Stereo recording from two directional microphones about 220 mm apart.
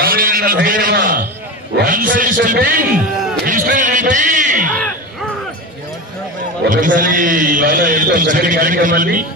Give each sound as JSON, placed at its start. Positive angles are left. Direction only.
{"t": 0.0, "sound": "a man's voice", "side_deg": -40}
{"t": 6.7, "sound": "a man's voice", "side_deg": -35}